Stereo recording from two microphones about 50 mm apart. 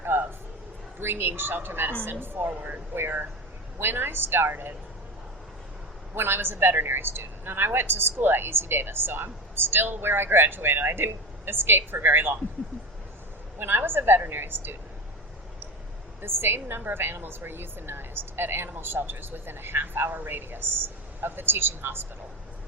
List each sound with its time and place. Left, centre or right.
0.0 s a sound: right
0.9 s a woman's voice: right
6.1 s a woman's voice: right
13.6 s a woman's voice: right
16.2 s a woman's voice: right